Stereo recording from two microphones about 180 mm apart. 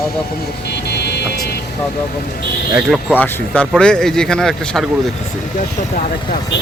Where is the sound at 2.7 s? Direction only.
Centre (ahead or behind).